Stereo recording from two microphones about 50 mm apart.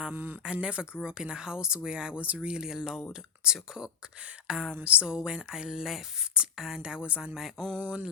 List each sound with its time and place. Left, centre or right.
0.1 s speech: right
0.4 s speech: right
2.2 s speech: right
2.5 s speech: centre